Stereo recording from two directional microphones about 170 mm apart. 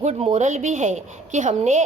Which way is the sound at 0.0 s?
35° right (ahead or behind).